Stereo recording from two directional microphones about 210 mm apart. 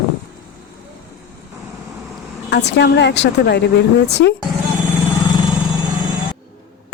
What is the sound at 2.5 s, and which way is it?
Speech, 55° left (ahead or behind).